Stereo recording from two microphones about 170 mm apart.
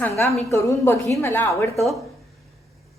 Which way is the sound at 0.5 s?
15° left (ahead or behind).